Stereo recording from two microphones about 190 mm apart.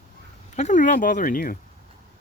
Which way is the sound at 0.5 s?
40° left (ahead or behind).